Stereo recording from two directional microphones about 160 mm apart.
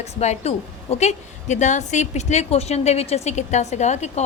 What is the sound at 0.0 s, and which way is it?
A woman's voice, 45° left (ahead or behind).